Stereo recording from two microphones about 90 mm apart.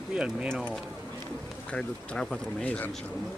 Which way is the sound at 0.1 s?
10° right (ahead or behind).